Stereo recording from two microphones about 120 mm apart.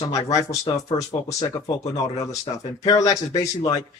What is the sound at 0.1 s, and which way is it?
A man's voice, 30° left (ahead or behind).